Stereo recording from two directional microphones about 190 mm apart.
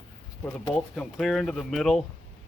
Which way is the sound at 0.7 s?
Centre (ahead or behind).